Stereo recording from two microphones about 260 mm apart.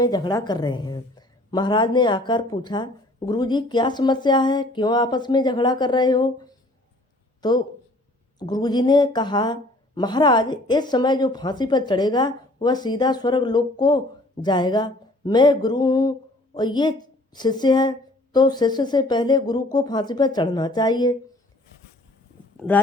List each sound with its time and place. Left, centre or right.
0.0 s a woman's voice: centre